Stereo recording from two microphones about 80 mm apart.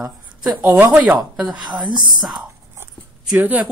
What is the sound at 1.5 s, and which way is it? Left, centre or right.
Speech, right.